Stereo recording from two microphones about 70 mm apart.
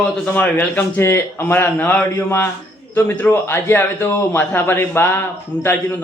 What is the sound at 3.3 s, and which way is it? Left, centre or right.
A man's voice, left.